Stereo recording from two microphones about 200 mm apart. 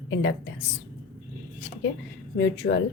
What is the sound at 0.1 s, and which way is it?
Speech, 65° left (ahead or behind).